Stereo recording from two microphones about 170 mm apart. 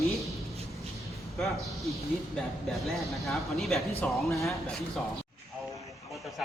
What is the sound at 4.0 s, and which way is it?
Speech, 15° left (ahead or behind).